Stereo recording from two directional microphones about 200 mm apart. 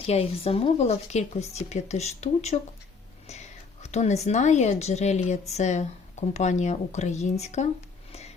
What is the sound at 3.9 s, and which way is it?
A woman's voice, 35° left (ahead or behind).